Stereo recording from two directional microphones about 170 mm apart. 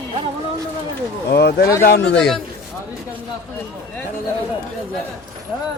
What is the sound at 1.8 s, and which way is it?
Speech, 85° left.